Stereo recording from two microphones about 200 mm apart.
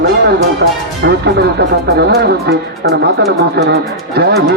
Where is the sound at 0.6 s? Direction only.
55° right (ahead or behind).